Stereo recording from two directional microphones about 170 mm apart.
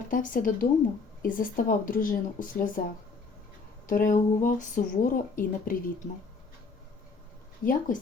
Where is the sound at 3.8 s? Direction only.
50° left (ahead or behind).